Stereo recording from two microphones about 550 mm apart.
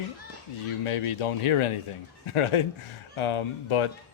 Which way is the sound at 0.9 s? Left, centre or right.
Left.